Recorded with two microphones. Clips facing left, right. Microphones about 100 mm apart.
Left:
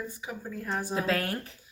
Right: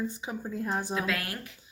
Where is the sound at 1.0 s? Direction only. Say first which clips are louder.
Left 3 dB; 35° left (ahead or behind).